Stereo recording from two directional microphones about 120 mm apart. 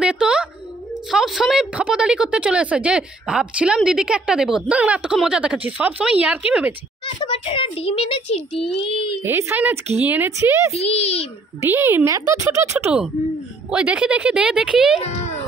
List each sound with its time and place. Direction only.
0.0 s a sound: 10° right (ahead or behind)
1.1 s a woman's voice: 5° right (ahead or behind)
7.2 s a child's voice: 50° left (ahead or behind)
9.2 s a woman's voice: 20° right (ahead or behind)
10.7 s a child's voice: 60° left (ahead or behind)
11.6 s speech: 20° right (ahead or behind)
13.7 s a woman's voice: 10° right (ahead or behind)
15.0 s a sound: 75° left (ahead or behind)